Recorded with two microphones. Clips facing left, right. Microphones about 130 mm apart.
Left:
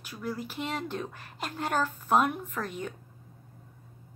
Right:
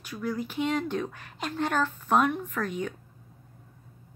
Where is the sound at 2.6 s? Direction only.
25° left (ahead or behind).